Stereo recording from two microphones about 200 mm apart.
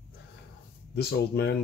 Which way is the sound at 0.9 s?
55° left (ahead or behind).